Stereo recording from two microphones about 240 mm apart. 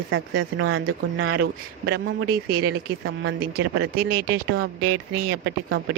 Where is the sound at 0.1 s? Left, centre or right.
Right.